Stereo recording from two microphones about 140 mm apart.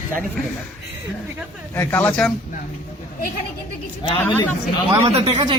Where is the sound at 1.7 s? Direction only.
15° left (ahead or behind).